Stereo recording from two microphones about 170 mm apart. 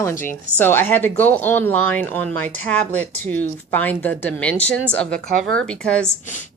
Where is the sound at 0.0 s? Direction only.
15° left (ahead or behind).